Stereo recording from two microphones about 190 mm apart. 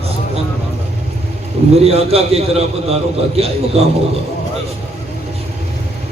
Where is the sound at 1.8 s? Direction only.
30° right (ahead or behind).